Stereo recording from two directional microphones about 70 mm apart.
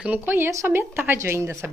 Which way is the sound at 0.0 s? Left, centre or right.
Right.